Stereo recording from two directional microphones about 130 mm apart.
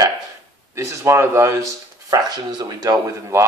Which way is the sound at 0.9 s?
20° right (ahead or behind).